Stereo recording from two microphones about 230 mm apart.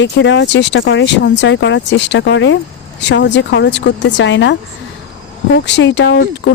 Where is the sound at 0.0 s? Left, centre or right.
Left.